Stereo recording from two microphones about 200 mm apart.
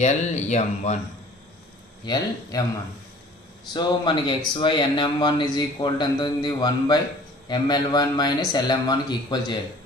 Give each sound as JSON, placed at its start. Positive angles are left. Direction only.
{"t": 0.0, "sound": "speech", "side_deg": 35}
{"t": 2.1, "sound": "speech", "side_deg": 20}
{"t": 3.7, "sound": "speech", "side_deg": 25}